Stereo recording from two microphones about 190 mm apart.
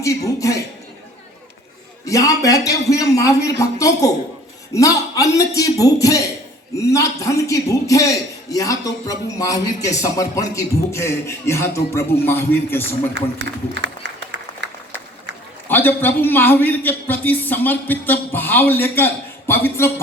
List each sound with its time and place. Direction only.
0.0 s a man's voice: 15° left (ahead or behind)
2.0 s a man's voice: 15° left (ahead or behind)
13.7 s applause: 70° right (ahead or behind)
15.6 s a man's voice: 10° left (ahead or behind)